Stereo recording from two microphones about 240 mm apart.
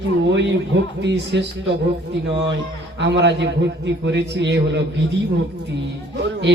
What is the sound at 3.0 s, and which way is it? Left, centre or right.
A man's voice, right.